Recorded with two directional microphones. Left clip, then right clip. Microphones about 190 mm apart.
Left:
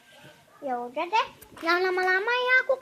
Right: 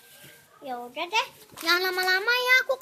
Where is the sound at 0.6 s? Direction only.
10° left (ahead or behind).